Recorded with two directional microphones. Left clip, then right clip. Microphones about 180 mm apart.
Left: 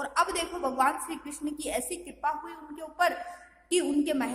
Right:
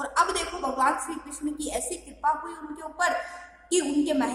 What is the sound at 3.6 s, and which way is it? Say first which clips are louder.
Speech: right 2 dB; 50° left (ahead or behind).